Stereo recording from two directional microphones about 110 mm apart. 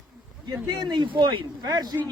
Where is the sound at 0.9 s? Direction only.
45° right (ahead or behind).